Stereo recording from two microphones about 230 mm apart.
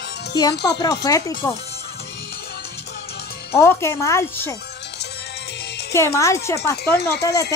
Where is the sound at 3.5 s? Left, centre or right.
Centre.